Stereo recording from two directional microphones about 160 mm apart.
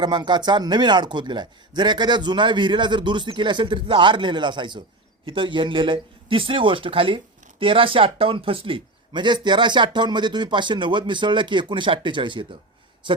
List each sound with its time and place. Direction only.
0.0 s a man's voice: 30° right (ahead or behind)